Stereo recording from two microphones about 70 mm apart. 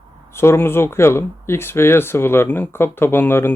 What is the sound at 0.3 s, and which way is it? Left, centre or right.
Speech, left.